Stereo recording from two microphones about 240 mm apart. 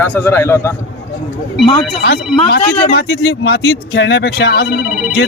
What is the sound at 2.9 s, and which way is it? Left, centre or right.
Speech, left.